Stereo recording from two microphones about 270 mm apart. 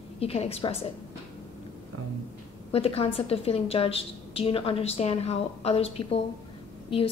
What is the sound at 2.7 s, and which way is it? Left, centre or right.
A woman's voice, left.